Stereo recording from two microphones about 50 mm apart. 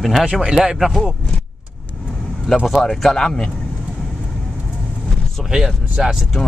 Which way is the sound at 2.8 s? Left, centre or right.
Centre.